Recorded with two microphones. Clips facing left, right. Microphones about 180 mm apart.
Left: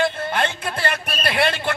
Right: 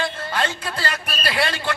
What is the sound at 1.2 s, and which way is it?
Speech, 55° left (ahead or behind).